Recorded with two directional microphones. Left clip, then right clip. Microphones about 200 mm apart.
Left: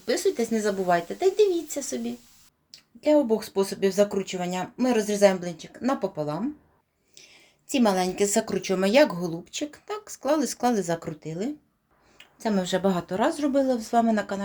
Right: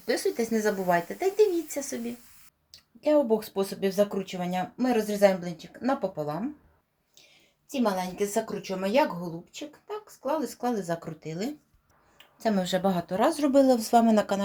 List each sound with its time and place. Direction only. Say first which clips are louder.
0.0 s speech: left 3 dB; 5° left (ahead or behind)
7.7 s a woman's voice: left 5 dB; 45° left (ahead or behind); by 11.5 s 20° left (ahead or behind)
12.1 s speech: even; 10° left (ahead or behind)
13.3 s speech: right 2 dB; 10° right (ahead or behind)